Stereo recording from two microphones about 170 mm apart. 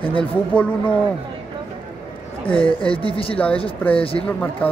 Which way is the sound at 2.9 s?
30° left (ahead or behind).